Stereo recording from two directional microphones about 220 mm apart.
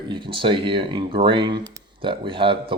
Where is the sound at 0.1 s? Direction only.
20° right (ahead or behind).